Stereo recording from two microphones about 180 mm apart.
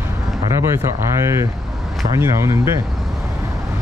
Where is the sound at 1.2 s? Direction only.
15° right (ahead or behind).